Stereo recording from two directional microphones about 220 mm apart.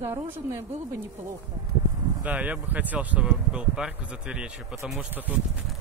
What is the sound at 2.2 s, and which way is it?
Speech, 5° right (ahead or behind).